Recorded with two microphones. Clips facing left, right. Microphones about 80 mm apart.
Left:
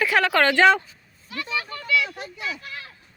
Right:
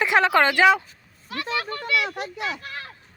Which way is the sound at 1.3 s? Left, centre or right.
Right.